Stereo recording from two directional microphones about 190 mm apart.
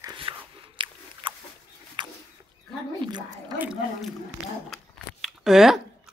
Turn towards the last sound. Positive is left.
turn(degrees=0)  # may be behind; listen again after turning